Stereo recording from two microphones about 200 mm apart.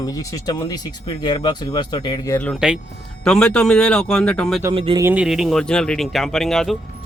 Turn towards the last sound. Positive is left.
turn(degrees=0)  # may be behind; listen again after turning